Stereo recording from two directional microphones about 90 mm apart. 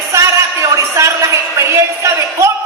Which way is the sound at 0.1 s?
35° right (ahead or behind).